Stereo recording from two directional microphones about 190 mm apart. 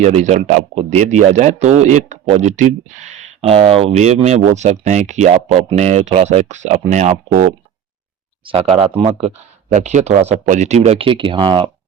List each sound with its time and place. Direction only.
0.0 s speech: 35° right (ahead or behind)
8.4 s speech: 30° right (ahead or behind)